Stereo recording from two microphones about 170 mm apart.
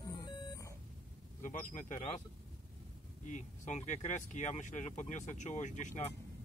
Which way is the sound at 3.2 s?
45° left (ahead or behind).